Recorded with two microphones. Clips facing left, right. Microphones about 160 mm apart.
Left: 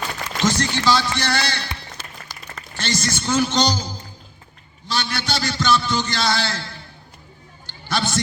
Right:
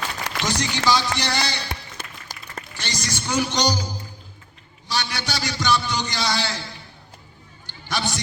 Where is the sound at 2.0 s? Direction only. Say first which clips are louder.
Even; 45° right (ahead or behind).